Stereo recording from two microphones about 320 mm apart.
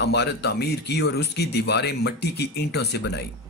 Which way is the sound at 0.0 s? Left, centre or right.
Left.